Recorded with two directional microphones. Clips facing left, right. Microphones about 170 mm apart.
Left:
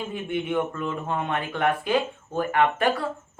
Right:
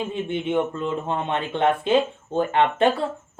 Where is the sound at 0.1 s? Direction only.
25° right (ahead or behind).